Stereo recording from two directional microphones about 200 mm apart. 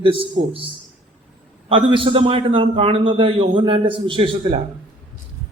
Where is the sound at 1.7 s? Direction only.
25° right (ahead or behind).